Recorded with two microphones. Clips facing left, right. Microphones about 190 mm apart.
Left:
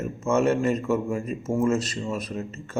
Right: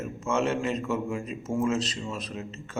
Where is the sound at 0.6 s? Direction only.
5° left (ahead or behind).